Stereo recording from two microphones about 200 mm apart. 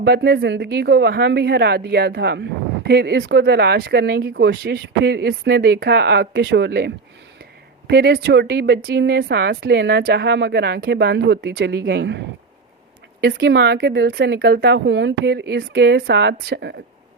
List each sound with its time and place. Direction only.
0.0 s a woman's voice: 55° right (ahead or behind)
13.2 s a woman's voice: 55° right (ahead or behind)